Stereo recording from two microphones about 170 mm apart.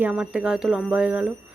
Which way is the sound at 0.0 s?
5° right (ahead or behind).